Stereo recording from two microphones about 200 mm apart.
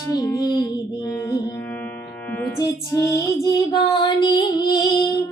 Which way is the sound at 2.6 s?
15° left (ahead or behind).